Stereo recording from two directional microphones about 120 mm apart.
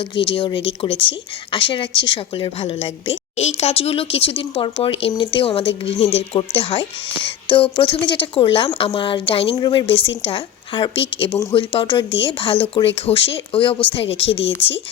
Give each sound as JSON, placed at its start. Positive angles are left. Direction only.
{"t": 0.0, "sound": "speech", "side_deg": 45}
{"t": 9.6, "sound": "speech", "side_deg": 30}
{"t": 9.8, "sound": "speech", "side_deg": 50}